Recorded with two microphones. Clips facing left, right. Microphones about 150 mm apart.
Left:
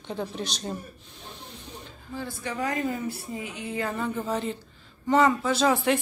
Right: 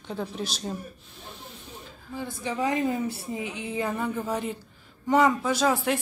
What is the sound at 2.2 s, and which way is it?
A woman's voice, 15° right (ahead or behind).